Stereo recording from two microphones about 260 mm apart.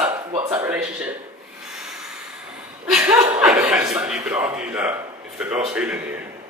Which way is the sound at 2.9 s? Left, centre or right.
Centre.